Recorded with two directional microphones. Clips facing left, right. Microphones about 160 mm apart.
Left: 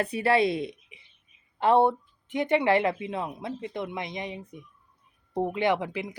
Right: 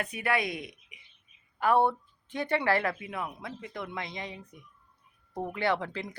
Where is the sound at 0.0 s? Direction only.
30° left (ahead or behind).